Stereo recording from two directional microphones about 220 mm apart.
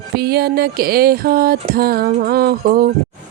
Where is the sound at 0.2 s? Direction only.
45° right (ahead or behind).